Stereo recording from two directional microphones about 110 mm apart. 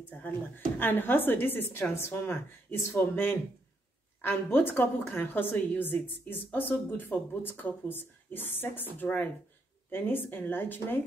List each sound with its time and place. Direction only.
0.7 s a woman's voice: 20° left (ahead or behind)